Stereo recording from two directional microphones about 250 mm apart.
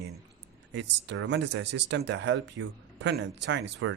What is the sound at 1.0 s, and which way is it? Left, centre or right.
Speech, right.